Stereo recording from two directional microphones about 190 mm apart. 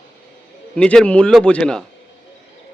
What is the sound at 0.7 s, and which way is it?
A man's voice, 5° left (ahead or behind).